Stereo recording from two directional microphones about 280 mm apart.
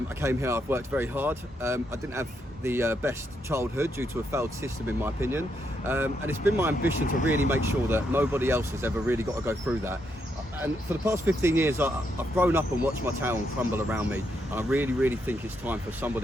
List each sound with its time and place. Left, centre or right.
0.2 s speech: centre
7.0 s speech: left
7.5 s speech: centre